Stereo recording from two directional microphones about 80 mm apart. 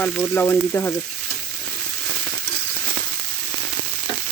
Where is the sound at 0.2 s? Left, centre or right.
Left.